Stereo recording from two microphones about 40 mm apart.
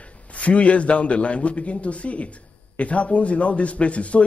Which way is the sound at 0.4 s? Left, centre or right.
Left.